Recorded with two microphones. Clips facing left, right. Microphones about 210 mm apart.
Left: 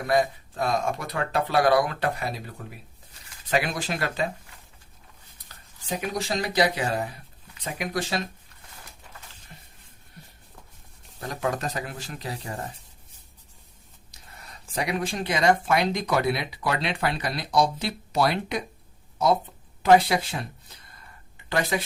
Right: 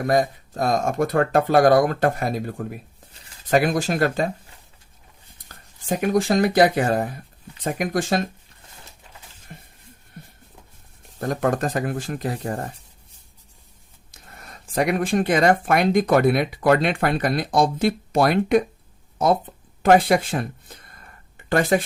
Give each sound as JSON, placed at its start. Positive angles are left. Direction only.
{"t": 0.0, "sound": "speech", "side_deg": -45}
{"t": 5.5, "sound": "speech", "side_deg": -50}
{"t": 9.5, "sound": "a sound", "side_deg": -50}
{"t": 11.2, "sound": "speech", "side_deg": -50}
{"t": 14.1, "sound": "speech", "side_deg": -50}
{"t": 19.8, "sound": "a sound", "side_deg": -50}